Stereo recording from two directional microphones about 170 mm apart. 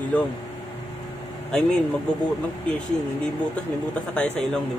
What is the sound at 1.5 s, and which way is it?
Speech, 5° left (ahead or behind).